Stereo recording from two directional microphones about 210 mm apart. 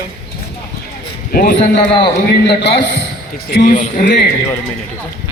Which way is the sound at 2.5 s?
55° left (ahead or behind).